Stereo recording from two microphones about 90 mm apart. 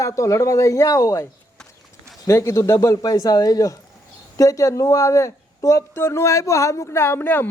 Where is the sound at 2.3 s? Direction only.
35° left (ahead or behind).